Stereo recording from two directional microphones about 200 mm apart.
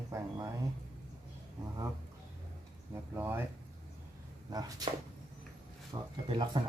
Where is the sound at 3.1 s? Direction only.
10° right (ahead or behind).